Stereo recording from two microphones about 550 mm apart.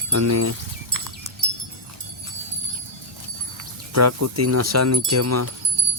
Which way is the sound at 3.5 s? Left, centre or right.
Right.